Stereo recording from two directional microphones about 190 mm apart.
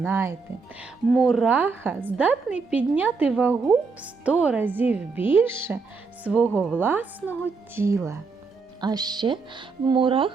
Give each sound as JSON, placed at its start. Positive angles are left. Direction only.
{"t": 0.0, "sound": "speech", "side_deg": -10}
{"t": 0.8, "sound": "speech", "side_deg": 0}
{"t": 6.5, "sound": "speech", "side_deg": 5}
{"t": 6.7, "sound": "speech", "side_deg": -10}